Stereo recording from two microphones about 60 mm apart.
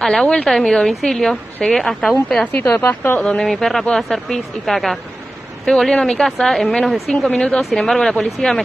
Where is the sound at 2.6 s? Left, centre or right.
Left.